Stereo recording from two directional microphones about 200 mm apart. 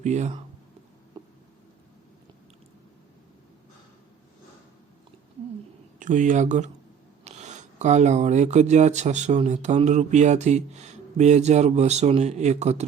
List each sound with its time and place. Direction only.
0.0 s speech: 35° right (ahead or behind)
1.2 s a sound: 20° right (ahead or behind)
6.0 s speech: 40° right (ahead or behind)